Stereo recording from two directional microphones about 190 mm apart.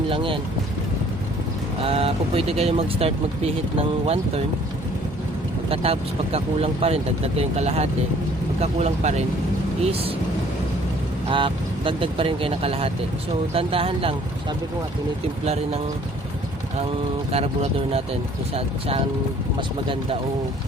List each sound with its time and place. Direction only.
0.1 s speech: 25° right (ahead or behind)
1.8 s speech: 30° right (ahead or behind)
5.6 s speech: 30° right (ahead or behind)
11.3 s speech: 25° right (ahead or behind)
15.4 s speech: 35° right (ahead or behind)
17.3 s speech: 30° right (ahead or behind)